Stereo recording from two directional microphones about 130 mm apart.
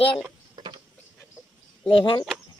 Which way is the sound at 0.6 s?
35° right (ahead or behind).